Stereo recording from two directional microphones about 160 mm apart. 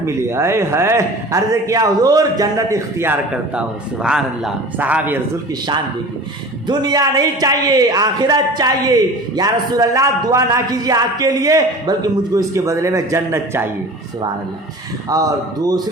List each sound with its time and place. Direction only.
0.0 s a man's voice: 15° right (ahead or behind)
6.7 s a man's voice: 25° right (ahead or behind)
15.1 s a man's voice: 20° right (ahead or behind)